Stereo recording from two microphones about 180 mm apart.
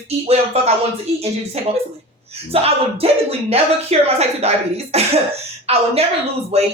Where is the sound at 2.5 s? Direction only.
35° right (ahead or behind).